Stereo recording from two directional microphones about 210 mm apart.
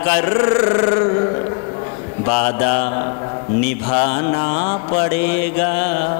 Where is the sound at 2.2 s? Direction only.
20° left (ahead or behind).